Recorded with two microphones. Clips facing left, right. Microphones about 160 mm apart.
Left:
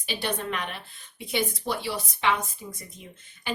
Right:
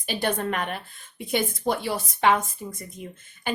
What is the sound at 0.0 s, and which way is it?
A woman's voice, 50° right (ahead or behind).